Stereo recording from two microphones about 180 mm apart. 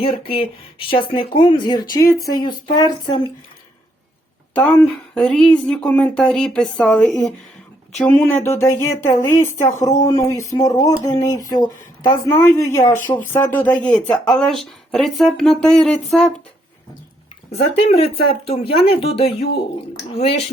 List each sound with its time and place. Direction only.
0.0 s speech: 30° left (ahead or behind)
4.5 s speech: 5° left (ahead or behind)
17.5 s speech: 35° left (ahead or behind)